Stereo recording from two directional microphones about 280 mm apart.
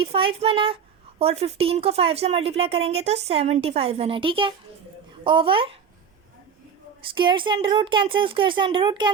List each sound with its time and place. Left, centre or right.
0.0 s speech: centre
7.2 s speech: centre